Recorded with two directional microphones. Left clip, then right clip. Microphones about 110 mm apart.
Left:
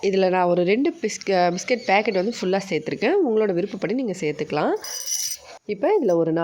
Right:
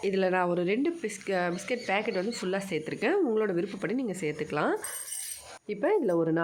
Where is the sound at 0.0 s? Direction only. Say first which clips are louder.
Left 8 dB; 35° left (ahead or behind).